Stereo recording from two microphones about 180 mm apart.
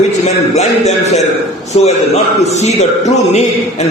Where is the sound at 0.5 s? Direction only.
40° left (ahead or behind).